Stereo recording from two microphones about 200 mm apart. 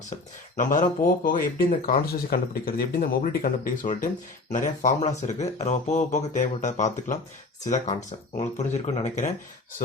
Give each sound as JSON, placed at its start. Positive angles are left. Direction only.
{"t": 0.1, "sound": "speech", "side_deg": 40}
{"t": 8.4, "sound": "speech", "side_deg": 30}